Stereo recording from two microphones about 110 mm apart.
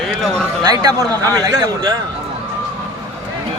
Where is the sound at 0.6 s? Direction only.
35° right (ahead or behind).